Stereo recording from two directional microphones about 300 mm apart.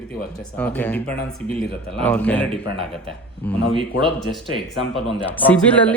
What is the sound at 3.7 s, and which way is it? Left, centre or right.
Speech, centre.